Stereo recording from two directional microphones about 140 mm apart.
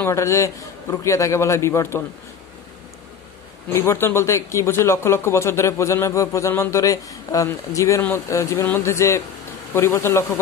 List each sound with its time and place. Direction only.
0.0 s speech: 20° left (ahead or behind)
3.7 s speech: 20° left (ahead or behind)